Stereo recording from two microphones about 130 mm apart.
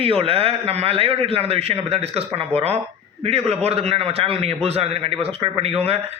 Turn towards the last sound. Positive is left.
turn(degrees=-50)  # may be behind; listen again after turning